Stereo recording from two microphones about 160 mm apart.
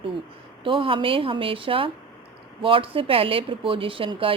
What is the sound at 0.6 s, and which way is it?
Speech, 35° right (ahead or behind).